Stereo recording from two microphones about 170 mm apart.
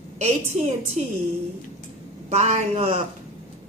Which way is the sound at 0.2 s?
40° right (ahead or behind).